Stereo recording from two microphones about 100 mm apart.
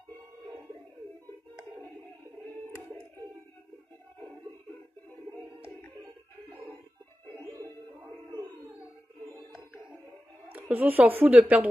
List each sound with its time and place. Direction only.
10.5 s speech: 15° right (ahead or behind)